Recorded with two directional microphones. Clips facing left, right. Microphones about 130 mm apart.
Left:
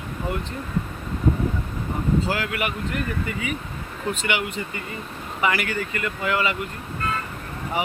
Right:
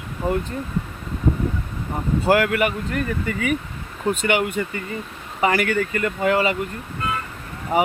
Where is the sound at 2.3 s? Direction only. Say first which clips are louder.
Right 8 dB; 60° right (ahead or behind).